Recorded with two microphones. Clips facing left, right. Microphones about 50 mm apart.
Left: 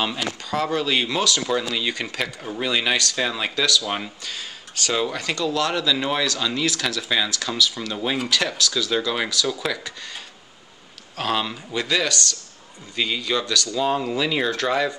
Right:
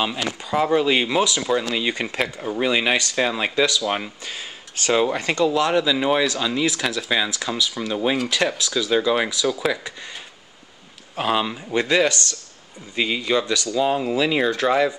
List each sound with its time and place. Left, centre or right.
0.0 s speech: centre
1.4 s speech: centre
1.8 s speech: right
3.8 s speech: centre
4.2 s speech: right
11.1 s speech: centre
11.7 s speech: right
13.7 s speech: centre